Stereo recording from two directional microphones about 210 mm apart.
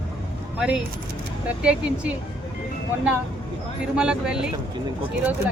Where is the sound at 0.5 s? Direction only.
5° right (ahead or behind).